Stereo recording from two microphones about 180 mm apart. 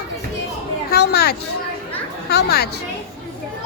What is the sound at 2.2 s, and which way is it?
Speech, 60° left (ahead or behind).